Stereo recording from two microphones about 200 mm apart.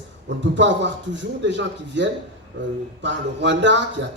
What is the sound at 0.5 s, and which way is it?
Speech, 65° right (ahead or behind).